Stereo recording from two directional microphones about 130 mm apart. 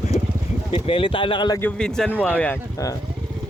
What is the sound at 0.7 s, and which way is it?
Speech, 45° left (ahead or behind).